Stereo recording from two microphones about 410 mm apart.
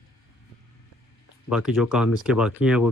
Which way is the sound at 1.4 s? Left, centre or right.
Centre.